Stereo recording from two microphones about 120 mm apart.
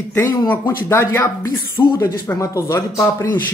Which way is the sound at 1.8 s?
35° left (ahead or behind).